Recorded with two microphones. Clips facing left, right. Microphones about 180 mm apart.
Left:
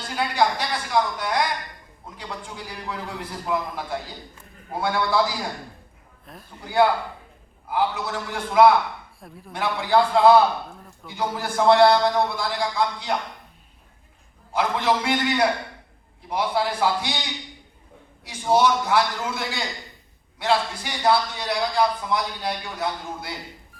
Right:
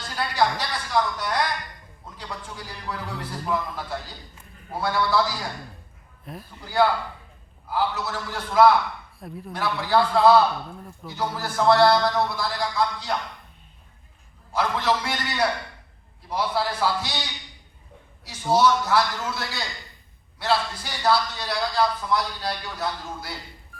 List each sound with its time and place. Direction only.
0.1 s a man's voice: 15° left (ahead or behind)
6.2 s a man's voice: 5° right (ahead or behind)
6.7 s a man's voice: 15° left (ahead or behind)
9.2 s a woman's voice: centre (ahead or behind)
9.6 s a man's voice: 15° left (ahead or behind)
14.5 s a man's voice: 15° left (ahead or behind)
18.3 s a man's voice: 15° left (ahead or behind)